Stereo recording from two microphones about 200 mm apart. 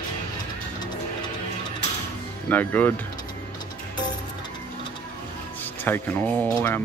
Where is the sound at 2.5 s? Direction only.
10° left (ahead or behind).